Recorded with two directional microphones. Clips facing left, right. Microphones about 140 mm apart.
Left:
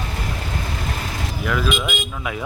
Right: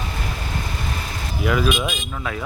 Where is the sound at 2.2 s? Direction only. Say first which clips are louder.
Even; 10° left (ahead or behind).